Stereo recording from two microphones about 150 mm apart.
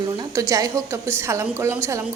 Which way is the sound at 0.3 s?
20° right (ahead or behind).